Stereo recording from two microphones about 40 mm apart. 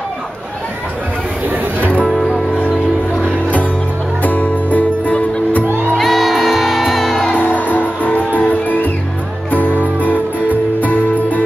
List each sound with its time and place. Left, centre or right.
4.2 s music: left
5.9 s music: centre
7.3 s music: left
9.9 s music: left